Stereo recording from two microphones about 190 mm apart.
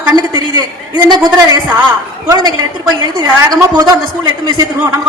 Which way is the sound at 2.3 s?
20° right (ahead or behind).